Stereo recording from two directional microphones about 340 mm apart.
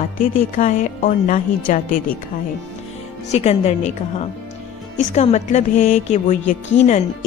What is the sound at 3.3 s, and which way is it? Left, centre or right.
Speech, centre.